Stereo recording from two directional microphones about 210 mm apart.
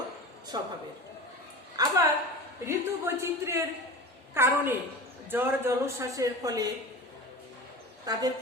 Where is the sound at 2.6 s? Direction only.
10° right (ahead or behind).